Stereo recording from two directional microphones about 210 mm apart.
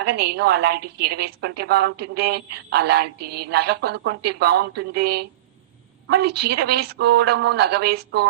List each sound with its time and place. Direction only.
0.0 s a woman's voice: 50° right (ahead or behind)